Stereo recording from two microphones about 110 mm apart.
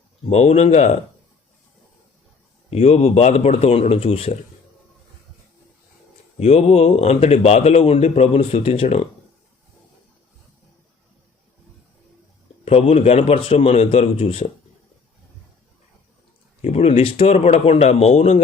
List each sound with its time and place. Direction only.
0.3 s speech: 75° left (ahead or behind)
2.6 s speech: 70° left (ahead or behind)
6.4 s speech: 70° left (ahead or behind)
12.6 s a man's voice: 65° left (ahead or behind)
16.6 s speech: 70° left (ahead or behind)